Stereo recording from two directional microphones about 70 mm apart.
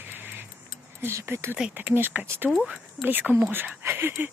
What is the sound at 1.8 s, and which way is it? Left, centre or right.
Speech, right.